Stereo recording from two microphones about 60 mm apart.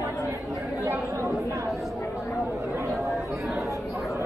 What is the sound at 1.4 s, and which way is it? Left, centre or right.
Chatter, right.